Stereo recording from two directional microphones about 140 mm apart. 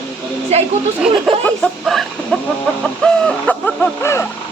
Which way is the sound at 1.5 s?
5° left (ahead or behind).